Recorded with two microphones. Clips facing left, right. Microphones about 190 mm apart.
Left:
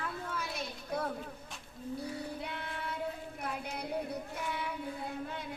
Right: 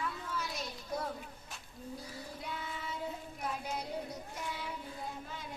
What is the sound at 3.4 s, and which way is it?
Child singing, 60° left (ahead or behind).